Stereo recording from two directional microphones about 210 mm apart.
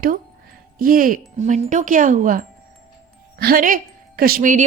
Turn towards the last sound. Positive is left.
turn(degrees=-40)  # may be behind; listen again after turning